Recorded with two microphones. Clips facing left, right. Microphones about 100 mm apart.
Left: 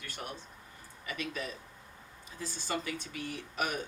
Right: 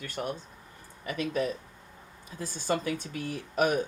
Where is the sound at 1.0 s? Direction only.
45° right (ahead or behind).